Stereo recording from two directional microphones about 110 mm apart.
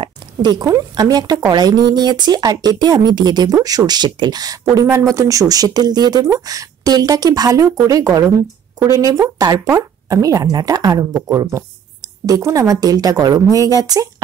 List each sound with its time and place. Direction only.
0.6 s speech: 35° right (ahead or behind)